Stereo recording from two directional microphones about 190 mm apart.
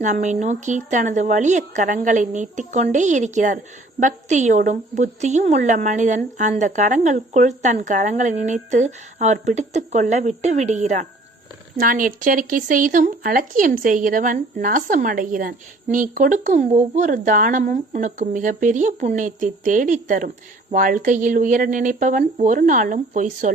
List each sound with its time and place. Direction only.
0.0 s a woman's voice: 40° right (ahead or behind)